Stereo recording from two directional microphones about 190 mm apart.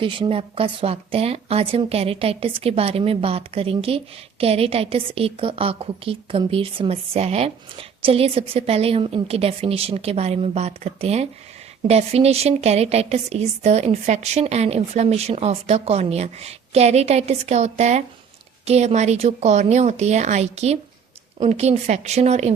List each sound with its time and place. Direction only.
0.0 s speech: 25° right (ahead or behind)